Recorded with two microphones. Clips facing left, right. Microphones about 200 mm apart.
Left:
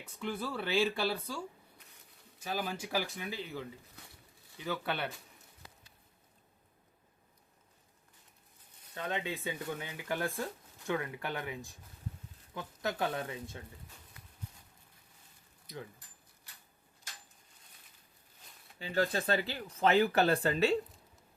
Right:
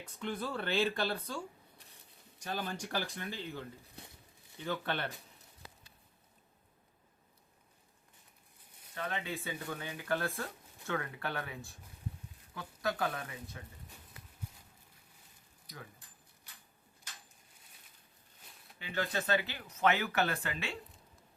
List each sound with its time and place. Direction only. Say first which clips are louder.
0.0 s speech: left 1 dB; 5° left (ahead or behind)
2.4 s speech: left 2 dB; 5° left (ahead or behind)
9.0 s speech: left 2 dB; 20° left (ahead or behind)
18.8 s speech: left 4 dB; 35° left (ahead or behind)